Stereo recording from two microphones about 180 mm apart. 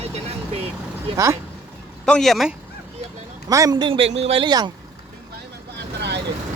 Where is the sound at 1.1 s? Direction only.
15° right (ahead or behind).